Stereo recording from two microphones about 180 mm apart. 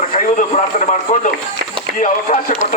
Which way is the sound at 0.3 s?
45° left (ahead or behind).